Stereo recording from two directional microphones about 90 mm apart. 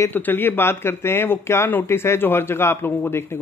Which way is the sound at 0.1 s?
25° left (ahead or behind).